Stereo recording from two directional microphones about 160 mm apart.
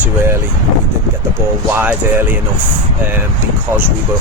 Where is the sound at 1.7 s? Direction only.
10° right (ahead or behind).